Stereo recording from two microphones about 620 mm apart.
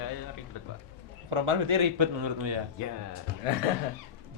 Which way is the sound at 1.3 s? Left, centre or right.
Right.